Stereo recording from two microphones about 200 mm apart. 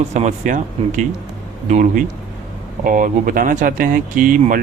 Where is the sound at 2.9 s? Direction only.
40° right (ahead or behind).